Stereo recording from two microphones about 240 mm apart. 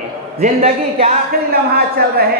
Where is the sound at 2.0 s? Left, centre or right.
Right.